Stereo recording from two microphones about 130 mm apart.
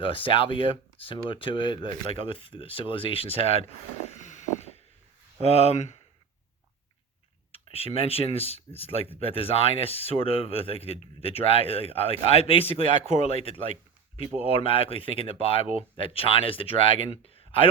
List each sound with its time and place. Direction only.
0.0 s speech: 40° left (ahead or behind); by 4.7 s 60° left (ahead or behind)
5.4 s speech: 50° left (ahead or behind)
7.5 s speech: 50° left (ahead or behind)